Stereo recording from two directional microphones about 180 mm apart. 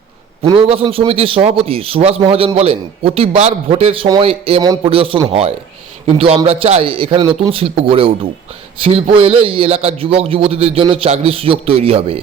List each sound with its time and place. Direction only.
0.4 s a man's voice: 30° right (ahead or behind)